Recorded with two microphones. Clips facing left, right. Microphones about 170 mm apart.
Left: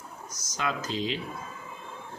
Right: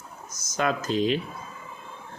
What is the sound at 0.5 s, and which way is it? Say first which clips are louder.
Speech: right 6 dB; 50° right (ahead or behind).